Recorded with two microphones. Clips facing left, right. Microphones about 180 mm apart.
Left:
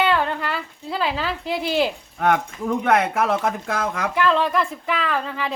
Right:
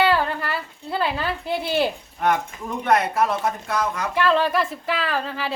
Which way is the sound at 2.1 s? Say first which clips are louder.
Left 3 dB; 80° left.